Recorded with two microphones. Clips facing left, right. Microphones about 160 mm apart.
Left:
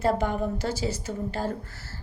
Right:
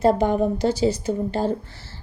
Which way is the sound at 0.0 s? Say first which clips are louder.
Right 7 dB; 20° right (ahead or behind).